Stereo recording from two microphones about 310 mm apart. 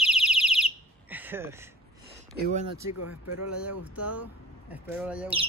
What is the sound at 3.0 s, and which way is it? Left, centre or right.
Speech, left.